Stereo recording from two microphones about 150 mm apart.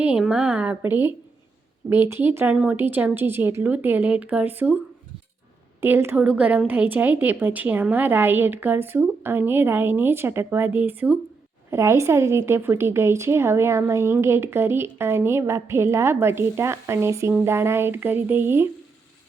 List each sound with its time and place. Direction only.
0.0 s a woman's voice: 10° right (ahead or behind)
5.8 s a woman's voice: 15° right (ahead or behind)